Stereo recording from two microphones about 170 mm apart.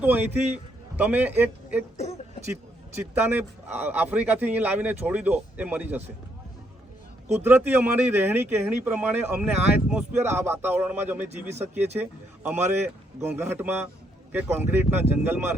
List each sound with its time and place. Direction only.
0.0 s a man's voice: 10° right (ahead or behind)
2.0 s a sound: 40° left (ahead or behind)
3.2 s speech: 10° right (ahead or behind)
7.4 s speech: 10° right (ahead or behind)